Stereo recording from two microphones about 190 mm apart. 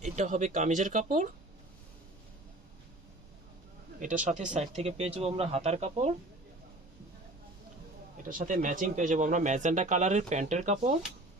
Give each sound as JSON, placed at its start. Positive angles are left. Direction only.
{"t": 0.0, "sound": "speech", "side_deg": -40}
{"t": 4.0, "sound": "speech", "side_deg": -40}
{"t": 8.3, "sound": "speech", "side_deg": -40}